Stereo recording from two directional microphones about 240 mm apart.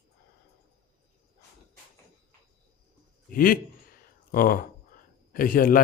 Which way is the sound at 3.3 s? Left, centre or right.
Left.